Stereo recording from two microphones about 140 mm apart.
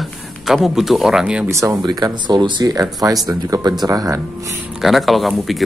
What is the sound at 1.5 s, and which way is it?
Speech, 20° right (ahead or behind).